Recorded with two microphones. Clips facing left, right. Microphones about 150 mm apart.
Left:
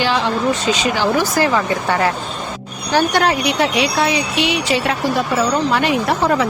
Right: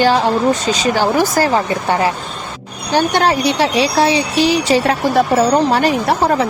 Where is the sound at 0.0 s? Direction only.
45° right (ahead or behind).